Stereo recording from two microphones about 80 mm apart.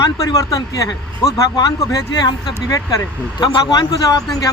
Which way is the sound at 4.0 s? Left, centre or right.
Left.